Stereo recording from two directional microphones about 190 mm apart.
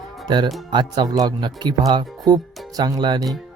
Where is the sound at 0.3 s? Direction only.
25° right (ahead or behind).